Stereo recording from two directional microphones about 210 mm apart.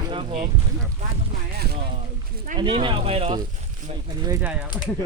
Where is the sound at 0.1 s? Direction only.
25° right (ahead or behind).